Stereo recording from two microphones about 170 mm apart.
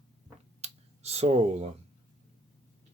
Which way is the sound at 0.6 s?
40° right (ahead or behind).